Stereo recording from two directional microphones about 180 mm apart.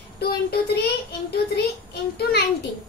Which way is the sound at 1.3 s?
60° left (ahead or behind).